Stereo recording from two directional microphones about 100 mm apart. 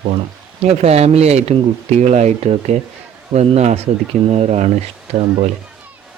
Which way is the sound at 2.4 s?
90° right.